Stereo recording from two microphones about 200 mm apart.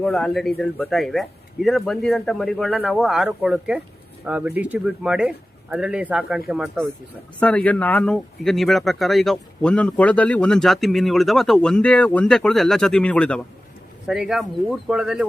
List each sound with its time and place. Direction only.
0.0 s speech: centre (ahead or behind)